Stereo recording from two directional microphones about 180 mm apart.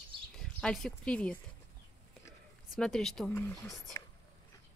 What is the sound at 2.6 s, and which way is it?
Speech, 5° left (ahead or behind).